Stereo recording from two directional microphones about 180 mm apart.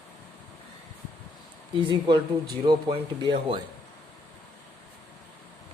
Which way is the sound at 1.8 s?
25° right (ahead or behind).